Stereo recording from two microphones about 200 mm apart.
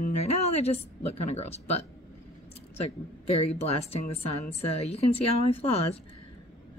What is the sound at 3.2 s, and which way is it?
A woman's voice, 30° left (ahead or behind).